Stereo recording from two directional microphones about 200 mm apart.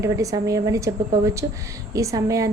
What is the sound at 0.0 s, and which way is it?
A woman's voice, 15° right (ahead or behind).